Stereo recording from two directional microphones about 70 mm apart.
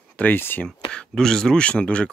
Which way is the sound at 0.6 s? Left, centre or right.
Centre.